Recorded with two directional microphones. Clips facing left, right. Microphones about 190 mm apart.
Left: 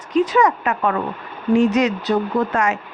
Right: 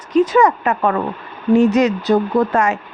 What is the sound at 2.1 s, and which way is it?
Speech, 40° right (ahead or behind).